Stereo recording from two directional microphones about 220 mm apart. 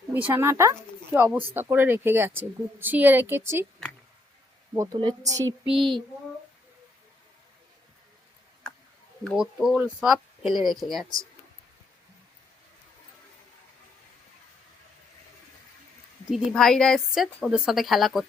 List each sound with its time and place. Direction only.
0.1 s speech: 10° right (ahead or behind)
4.7 s speech: 15° right (ahead or behind)
5.6 s a woman's voice: centre (ahead or behind)
8.7 s a sound: 5° left (ahead or behind)
9.2 s a woman's voice: centre (ahead or behind)
16.3 s a woman's voice: centre (ahead or behind)